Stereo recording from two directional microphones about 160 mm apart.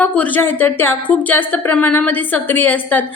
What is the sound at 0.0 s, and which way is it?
A woman's voice, 10° left (ahead or behind).